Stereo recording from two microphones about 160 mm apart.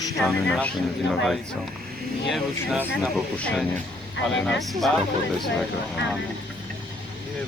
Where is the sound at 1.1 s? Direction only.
Centre (ahead or behind).